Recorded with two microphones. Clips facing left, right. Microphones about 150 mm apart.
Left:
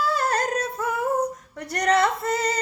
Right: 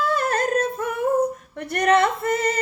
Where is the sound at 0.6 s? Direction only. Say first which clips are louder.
Right 3 dB; 25° right (ahead or behind).